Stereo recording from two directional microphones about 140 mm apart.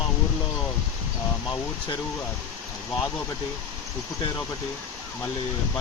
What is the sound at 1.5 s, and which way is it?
Speech, 35° left (ahead or behind).